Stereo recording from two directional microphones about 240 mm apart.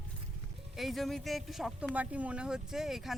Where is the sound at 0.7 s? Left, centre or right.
Centre.